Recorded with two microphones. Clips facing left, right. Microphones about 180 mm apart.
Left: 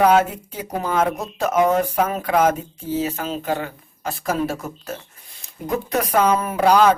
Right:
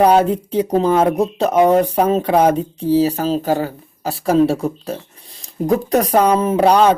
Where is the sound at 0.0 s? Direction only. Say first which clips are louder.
Right 4 dB; 35° right (ahead or behind).